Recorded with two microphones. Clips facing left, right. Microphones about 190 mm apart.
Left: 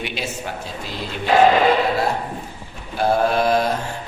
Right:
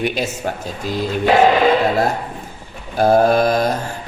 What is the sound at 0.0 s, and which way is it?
Speech, 45° right (ahead or behind).